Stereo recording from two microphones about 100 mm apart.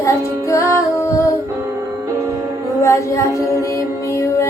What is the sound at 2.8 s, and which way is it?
Music, 30° left (ahead or behind).